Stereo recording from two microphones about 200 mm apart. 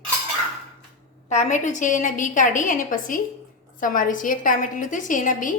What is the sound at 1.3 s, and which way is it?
A woman's voice, 35° left (ahead or behind).